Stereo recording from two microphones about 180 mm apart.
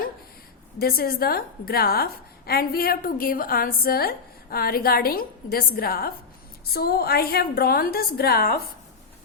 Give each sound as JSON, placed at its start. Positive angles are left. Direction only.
{"t": 0.8, "sound": "a woman's voice", "side_deg": 55}